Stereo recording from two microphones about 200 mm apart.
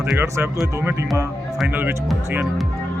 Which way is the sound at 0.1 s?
5° right (ahead or behind).